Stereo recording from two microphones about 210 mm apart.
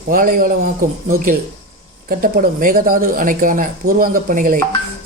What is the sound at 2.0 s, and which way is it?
A man's voice, 40° right (ahead or behind).